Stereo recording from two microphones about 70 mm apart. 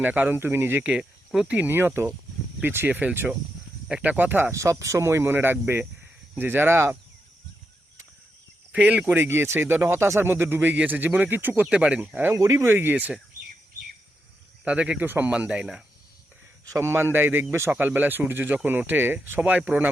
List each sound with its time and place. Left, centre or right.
0.0 s speech: right
0.8 s speech: centre
3.8 s speech: centre
4.5 s speech: right
8.7 s speech: right
9.0 s speech: right
11.7 s speech: centre
12.3 s speech: right
14.6 s speech: centre
15.0 s speech: right
15.3 s speech: centre
16.7 s speech: right
19.4 s speech: centre